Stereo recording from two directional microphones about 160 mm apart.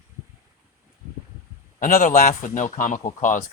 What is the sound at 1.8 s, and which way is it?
Speech, 60° left (ahead or behind).